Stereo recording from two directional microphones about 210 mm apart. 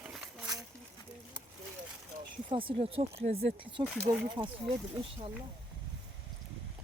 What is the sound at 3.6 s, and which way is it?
Speech, 25° right (ahead or behind).